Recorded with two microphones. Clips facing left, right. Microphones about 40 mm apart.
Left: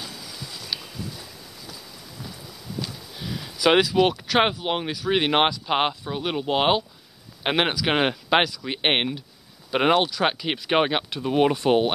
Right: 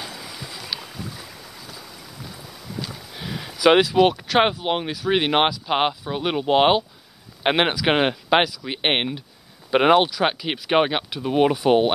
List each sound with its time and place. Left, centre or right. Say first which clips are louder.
0.0 s boat: right 3 dB; right
3.2 s a sound: right 1 dB; right
3.5 s speech: right 3 dB; centre
6.1 s speech: right 6 dB; centre
9.7 s speech: right 4 dB; centre